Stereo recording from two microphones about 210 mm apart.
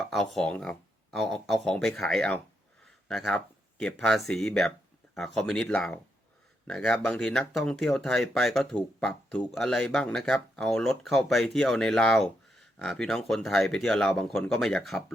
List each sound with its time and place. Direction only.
0.0 s speech: centre (ahead or behind)
2.8 s a sound: centre (ahead or behind)
4.3 s speech: 5° left (ahead or behind)